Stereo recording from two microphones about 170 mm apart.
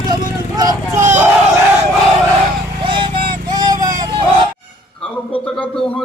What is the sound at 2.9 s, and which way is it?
Clip-clop, 30° right (ahead or behind).